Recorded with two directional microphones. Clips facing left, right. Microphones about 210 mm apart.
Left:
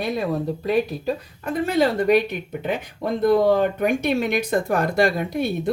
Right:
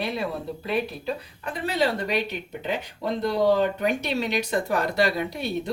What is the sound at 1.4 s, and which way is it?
Speech, 50° left (ahead or behind).